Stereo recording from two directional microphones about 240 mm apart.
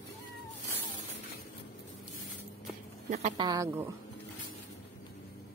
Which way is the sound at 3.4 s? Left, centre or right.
Centre.